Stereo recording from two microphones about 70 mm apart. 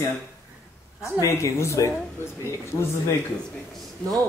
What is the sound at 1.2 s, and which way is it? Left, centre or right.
Speech, left.